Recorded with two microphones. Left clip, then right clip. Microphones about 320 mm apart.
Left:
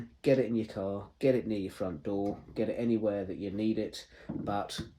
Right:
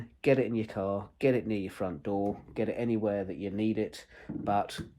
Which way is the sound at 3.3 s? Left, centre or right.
Right.